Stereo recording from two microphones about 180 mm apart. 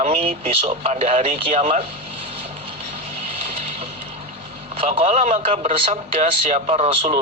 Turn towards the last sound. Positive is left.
turn(degrees=-35)  # may be behind; listen again after turning